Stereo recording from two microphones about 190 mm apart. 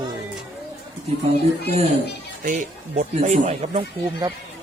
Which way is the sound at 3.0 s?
35° right (ahead or behind).